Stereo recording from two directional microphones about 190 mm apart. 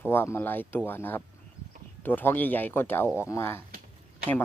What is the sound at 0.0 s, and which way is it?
Speech, 10° left (ahead or behind).